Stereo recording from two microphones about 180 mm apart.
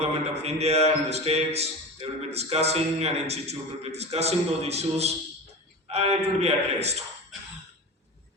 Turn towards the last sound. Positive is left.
turn(degrees=-35)  # may be behind; listen again after turning